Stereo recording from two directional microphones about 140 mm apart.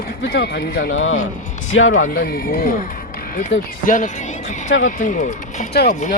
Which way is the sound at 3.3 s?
70° left (ahead or behind).